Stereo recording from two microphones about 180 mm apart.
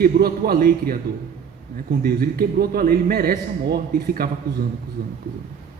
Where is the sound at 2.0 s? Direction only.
55° right (ahead or behind).